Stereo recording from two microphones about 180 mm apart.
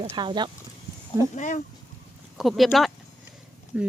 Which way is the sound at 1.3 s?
45° left (ahead or behind).